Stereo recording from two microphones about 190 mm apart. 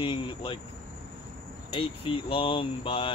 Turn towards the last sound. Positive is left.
turn(degrees=30)  # may be behind; listen again after turning